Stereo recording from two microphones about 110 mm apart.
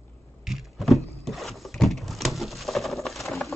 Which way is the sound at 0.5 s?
Centre (ahead or behind).